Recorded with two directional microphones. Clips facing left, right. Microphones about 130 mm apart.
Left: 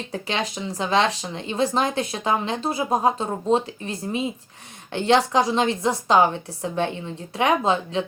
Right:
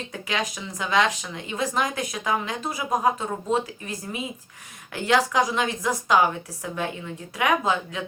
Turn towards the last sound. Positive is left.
turn(degrees=30)  # may be behind; listen again after turning